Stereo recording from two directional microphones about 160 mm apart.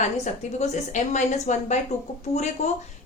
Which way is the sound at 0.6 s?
45° left (ahead or behind).